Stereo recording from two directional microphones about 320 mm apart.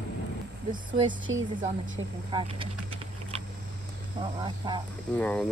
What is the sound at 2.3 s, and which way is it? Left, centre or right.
Speech, centre.